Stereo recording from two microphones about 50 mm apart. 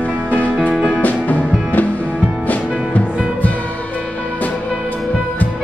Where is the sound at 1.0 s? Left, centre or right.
Left.